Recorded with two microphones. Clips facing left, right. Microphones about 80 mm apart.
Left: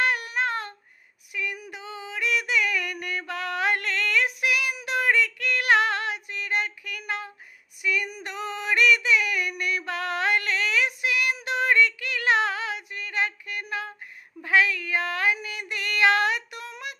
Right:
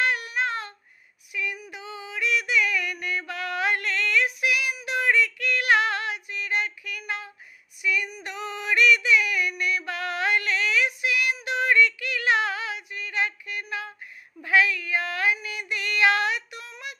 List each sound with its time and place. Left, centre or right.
0.0 s child singing: left
1.3 s female singing: left
1.8 s a sound: left
14.4 s female singing: left